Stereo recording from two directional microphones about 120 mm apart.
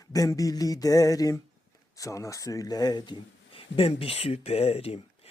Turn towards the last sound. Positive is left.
turn(degrees=55)  # may be behind; listen again after turning